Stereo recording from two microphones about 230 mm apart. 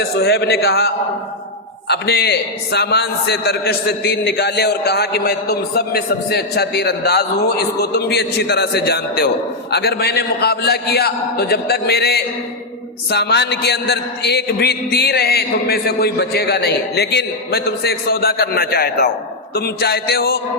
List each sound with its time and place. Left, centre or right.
0.0 s a man's voice: left